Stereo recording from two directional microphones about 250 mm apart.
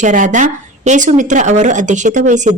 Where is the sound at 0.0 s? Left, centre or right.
Right.